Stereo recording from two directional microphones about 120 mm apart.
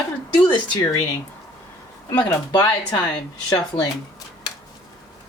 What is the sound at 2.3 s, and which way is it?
Speech, 30° left (ahead or behind).